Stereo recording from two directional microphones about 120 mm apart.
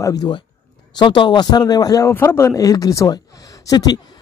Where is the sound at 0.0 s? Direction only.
35° left (ahead or behind).